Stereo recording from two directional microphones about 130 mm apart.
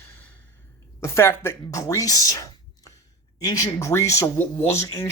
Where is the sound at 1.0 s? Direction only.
20° left (ahead or behind).